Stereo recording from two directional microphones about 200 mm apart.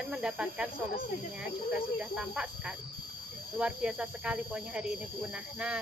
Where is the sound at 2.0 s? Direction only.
5° right (ahead or behind).